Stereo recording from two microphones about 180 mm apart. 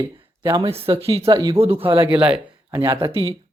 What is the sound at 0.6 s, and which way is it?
Speech, 35° right (ahead or behind).